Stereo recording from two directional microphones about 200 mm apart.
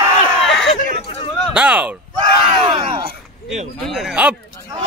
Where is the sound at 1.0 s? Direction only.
30° left (ahead or behind).